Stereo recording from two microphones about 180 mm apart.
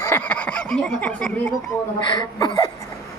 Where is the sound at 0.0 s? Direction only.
10° left (ahead or behind).